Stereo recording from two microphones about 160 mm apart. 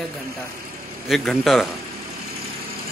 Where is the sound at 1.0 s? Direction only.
Centre (ahead or behind).